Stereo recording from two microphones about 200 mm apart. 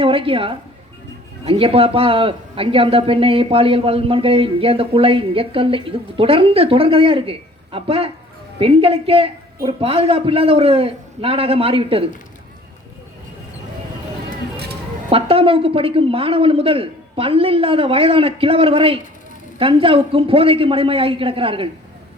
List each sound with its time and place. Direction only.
0.0 s speech: 25° right (ahead or behind)
15.1 s speech: 30° right (ahead or behind)